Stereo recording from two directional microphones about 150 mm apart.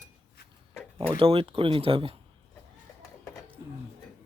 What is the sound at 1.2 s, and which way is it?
Speech, 40° right (ahead or behind).